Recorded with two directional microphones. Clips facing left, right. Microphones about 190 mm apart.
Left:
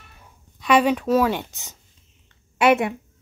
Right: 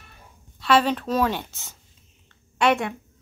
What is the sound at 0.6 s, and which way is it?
A woman's voice, 15° left (ahead or behind).